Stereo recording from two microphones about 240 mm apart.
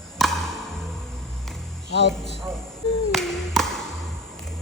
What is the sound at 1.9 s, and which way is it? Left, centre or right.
Speech, left.